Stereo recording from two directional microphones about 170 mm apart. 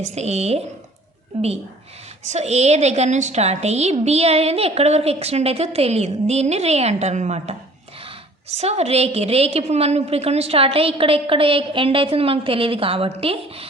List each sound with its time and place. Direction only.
0.0 s a woman's voice: 40° right (ahead or behind)